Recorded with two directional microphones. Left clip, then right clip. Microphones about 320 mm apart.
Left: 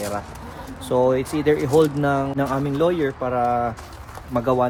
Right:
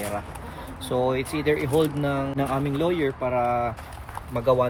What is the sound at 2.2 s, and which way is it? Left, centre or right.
Speech, centre.